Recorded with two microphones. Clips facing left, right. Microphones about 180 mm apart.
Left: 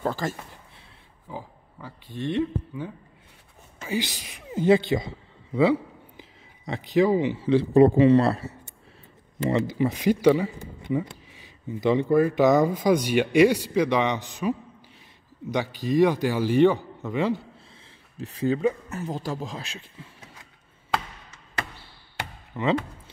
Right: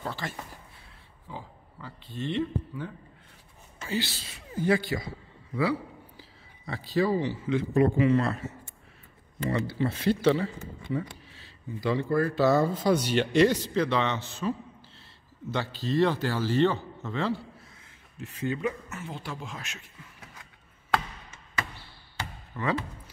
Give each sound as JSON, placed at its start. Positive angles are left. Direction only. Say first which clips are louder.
{"t": 0.0, "sound": "speech", "louder": "left 8 dB", "side_deg": 45}
{"t": 1.3, "sound": "speech", "louder": "left 4 dB", "side_deg": 10}
{"t": 5.6, "sound": "a sound", "louder": "left 7 dB", "side_deg": 20}
{"t": 7.4, "sound": "speech", "louder": "left 8 dB", "side_deg": 30}
{"t": 9.5, "sound": "speech", "louder": "left 5 dB", "side_deg": 15}
{"t": 15.5, "sound": "speech", "louder": "left 4 dB", "side_deg": 15}
{"t": 18.2, "sound": "speech", "louder": "left 7 dB", "side_deg": 35}
{"t": 22.5, "sound": "speech", "louder": "left 6 dB", "side_deg": 20}